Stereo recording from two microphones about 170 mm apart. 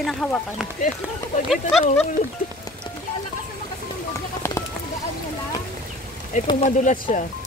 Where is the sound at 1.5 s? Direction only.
Centre (ahead or behind).